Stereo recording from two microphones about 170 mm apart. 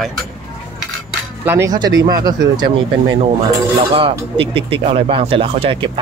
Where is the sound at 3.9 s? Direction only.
30° right (ahead or behind).